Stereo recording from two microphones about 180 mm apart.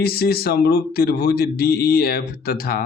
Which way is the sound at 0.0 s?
60° left (ahead or behind).